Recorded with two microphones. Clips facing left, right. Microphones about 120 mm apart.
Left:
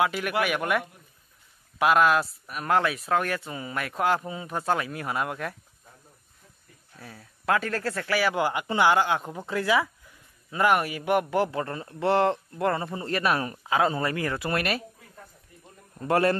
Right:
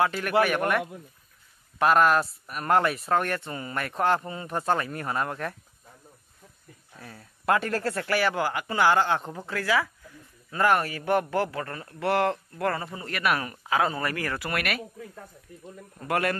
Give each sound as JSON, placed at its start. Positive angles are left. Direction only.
{"t": 0.0, "sound": "a man's voice", "side_deg": 10}
{"t": 7.0, "sound": "speech", "side_deg": 5}
{"t": 8.4, "sound": "speech", "side_deg": 20}
{"t": 16.1, "sound": "speech", "side_deg": 30}